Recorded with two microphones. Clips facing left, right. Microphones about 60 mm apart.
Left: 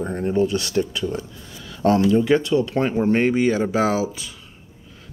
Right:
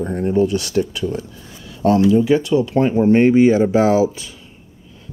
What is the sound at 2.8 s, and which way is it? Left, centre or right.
Speech, left.